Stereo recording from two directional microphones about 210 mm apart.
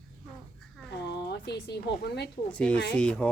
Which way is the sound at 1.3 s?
50° left (ahead or behind).